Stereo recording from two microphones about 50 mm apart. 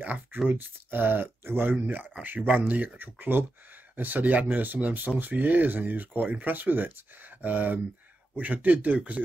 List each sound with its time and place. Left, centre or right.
0.0 s speech: right